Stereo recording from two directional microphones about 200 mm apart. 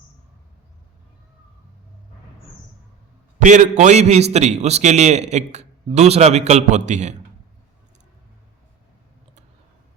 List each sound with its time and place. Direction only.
3.4 s a man's voice: 35° right (ahead or behind)